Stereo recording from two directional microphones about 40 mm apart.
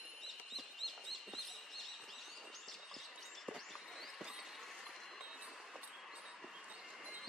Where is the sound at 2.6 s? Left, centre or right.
Centre.